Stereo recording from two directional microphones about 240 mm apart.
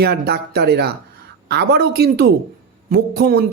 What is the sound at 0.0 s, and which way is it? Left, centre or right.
A man's voice, right.